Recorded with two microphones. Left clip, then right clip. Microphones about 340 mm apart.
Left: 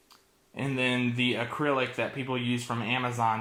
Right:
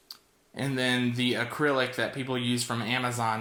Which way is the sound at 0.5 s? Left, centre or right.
Centre.